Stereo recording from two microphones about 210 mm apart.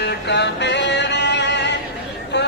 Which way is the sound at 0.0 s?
55° left (ahead or behind).